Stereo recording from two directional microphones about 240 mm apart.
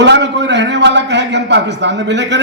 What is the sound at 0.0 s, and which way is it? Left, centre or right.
A man's voice, right.